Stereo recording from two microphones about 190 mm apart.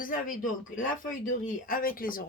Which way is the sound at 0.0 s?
45° left (ahead or behind).